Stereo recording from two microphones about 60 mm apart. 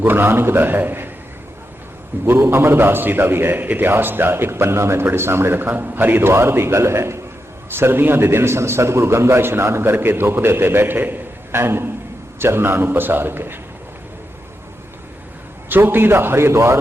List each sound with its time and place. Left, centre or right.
0.0 s a man's voice: right
2.2 s a man's voice: right
15.7 s a man's voice: right